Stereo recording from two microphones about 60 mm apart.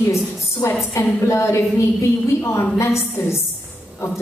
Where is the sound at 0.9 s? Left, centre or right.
Left.